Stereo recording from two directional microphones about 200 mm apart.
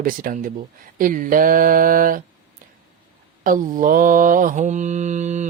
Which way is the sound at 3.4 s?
45° right (ahead or behind).